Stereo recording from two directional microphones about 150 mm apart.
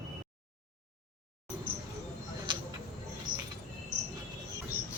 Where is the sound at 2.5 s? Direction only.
30° right (ahead or behind).